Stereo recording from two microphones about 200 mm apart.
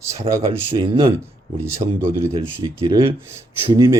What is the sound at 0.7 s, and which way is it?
Speech, 20° right (ahead or behind).